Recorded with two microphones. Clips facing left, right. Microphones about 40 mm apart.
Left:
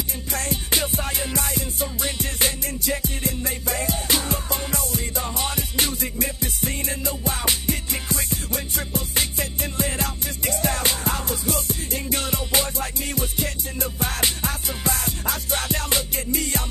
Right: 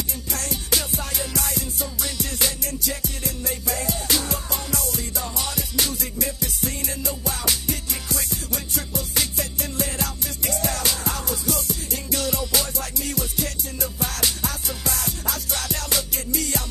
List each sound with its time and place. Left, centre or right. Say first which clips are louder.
0.3 s music: left 1 dB; left